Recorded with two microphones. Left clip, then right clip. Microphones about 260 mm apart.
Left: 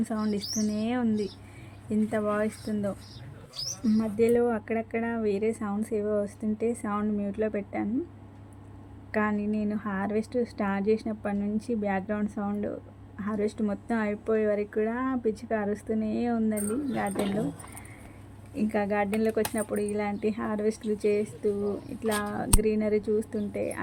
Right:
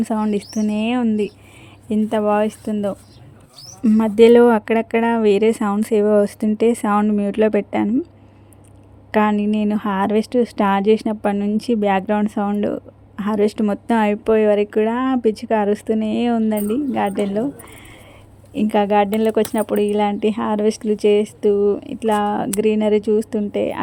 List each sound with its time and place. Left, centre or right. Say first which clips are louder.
0.0 s speech: right 10 dB; right
9.1 s speech: right 11 dB; right
18.5 s speech: right 12 dB; right